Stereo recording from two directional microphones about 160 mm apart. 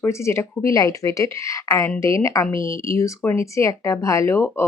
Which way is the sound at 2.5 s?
35° right (ahead or behind).